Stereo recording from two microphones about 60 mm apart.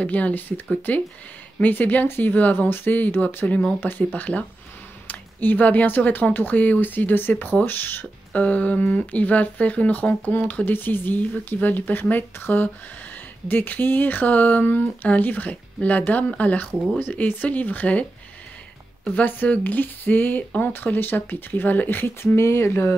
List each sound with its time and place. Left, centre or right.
0.0 s speech: left
8.3 s speech: left
19.0 s speech: left